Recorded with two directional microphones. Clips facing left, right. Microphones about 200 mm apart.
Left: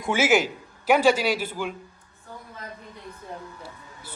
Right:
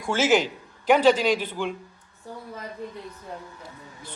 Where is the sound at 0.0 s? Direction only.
10° left (ahead or behind).